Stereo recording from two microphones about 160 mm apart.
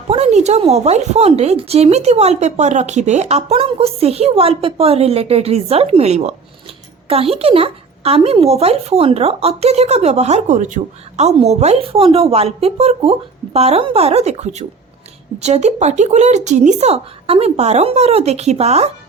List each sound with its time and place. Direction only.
0.1 s speech: 40° right (ahead or behind)